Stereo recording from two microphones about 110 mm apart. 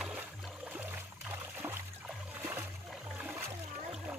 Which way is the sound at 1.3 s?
15° right (ahead or behind).